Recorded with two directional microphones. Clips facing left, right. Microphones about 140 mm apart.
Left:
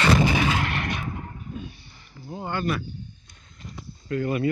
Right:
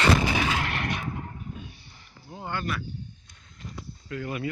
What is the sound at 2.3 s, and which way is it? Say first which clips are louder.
Speech: left 5 dB; 30° left (ahead or behind).